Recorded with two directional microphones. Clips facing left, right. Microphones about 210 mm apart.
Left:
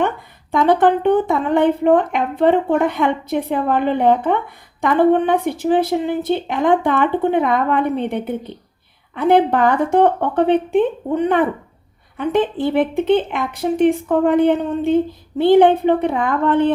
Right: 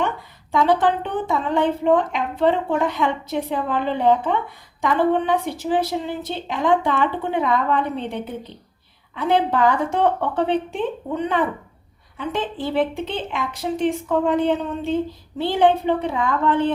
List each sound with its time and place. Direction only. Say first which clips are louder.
0.5 s a woman's voice: left 4 dB; 55° left (ahead or behind)